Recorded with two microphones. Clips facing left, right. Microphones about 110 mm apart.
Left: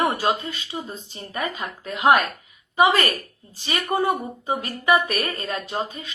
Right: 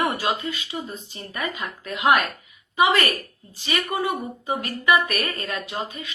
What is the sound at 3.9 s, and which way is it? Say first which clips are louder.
Speech: left 8 dB; 35° left (ahead or behind).